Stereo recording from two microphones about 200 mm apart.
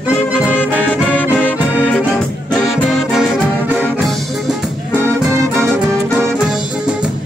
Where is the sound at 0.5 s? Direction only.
10° left (ahead or behind).